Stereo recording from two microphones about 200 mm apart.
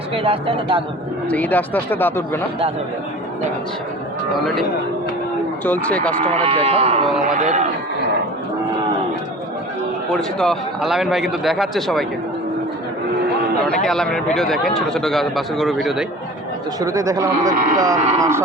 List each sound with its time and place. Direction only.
0.2 s speech: 25° right (ahead or behind)
1.3 s speech: 10° left (ahead or behind)
5.6 s speech: 10° left (ahead or behind)
6.2 s speech: 30° right (ahead or behind)
10.1 s a man's voice: 5° left (ahead or behind)
13.7 s a man's voice: centre (ahead or behind)
16.8 s speech: 15° right (ahead or behind)